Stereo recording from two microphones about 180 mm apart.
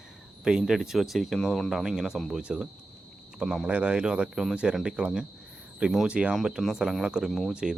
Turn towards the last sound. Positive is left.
turn(degrees=-5)  # may be behind; listen again after turning